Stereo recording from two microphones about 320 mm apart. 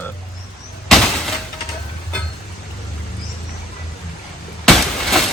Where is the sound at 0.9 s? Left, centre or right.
Centre.